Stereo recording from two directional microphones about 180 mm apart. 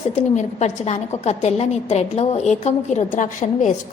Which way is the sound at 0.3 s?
40° left (ahead or behind).